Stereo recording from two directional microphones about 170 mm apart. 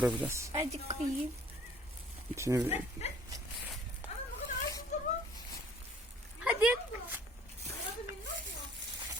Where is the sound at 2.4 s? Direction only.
15° right (ahead or behind).